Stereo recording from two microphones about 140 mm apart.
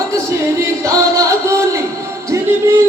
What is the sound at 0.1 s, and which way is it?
Music, 20° right (ahead or behind).